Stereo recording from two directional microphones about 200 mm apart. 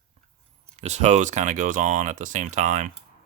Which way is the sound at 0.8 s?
35° right (ahead or behind).